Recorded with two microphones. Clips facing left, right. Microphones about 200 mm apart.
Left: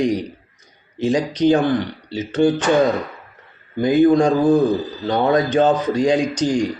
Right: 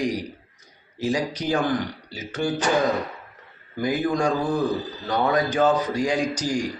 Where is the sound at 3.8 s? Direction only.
25° left (ahead or behind).